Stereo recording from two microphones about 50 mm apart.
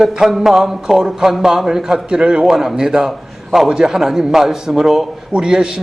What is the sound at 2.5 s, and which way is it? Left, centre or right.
A man's voice, centre.